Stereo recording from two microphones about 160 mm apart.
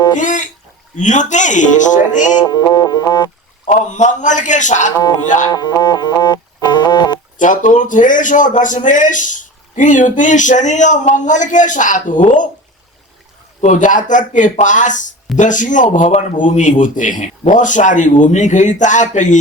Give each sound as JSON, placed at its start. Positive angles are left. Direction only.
{"t": 0.2, "sound": "a man's voice", "side_deg": 50}
{"t": 2.5, "sound": "music", "side_deg": 25}
{"t": 3.7, "sound": "a man's voice", "side_deg": 50}
{"t": 5.5, "sound": "music", "side_deg": 25}
{"t": 7.3, "sound": "a man's voice", "side_deg": 55}
{"t": 13.6, "sound": "a man's voice", "side_deg": 50}